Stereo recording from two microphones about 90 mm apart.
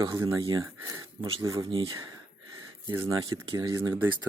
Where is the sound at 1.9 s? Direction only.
40° right (ahead or behind).